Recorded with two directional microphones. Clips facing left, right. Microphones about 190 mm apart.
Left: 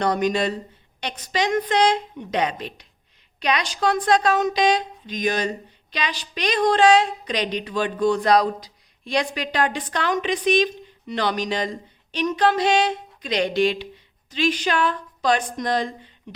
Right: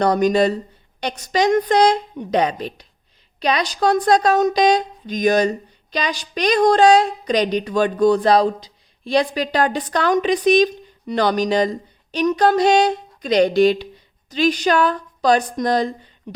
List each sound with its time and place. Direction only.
0.0 s a woman's voice: 40° right (ahead or behind)